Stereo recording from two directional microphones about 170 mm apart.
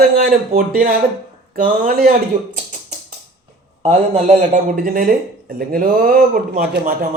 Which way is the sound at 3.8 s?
40° right (ahead or behind).